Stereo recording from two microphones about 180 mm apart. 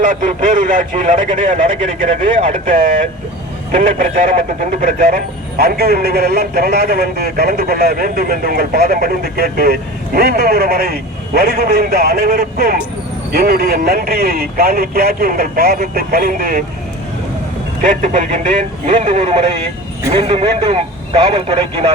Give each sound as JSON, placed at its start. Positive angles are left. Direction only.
{"t": 0.0, "sound": "speech", "side_deg": -45}
{"t": 18.0, "sound": "a man's voice", "side_deg": -40}